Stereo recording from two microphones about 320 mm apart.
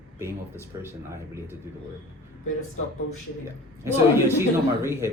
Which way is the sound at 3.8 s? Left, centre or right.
Centre.